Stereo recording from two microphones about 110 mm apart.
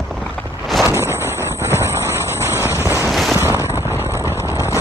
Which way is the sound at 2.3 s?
20° right (ahead or behind).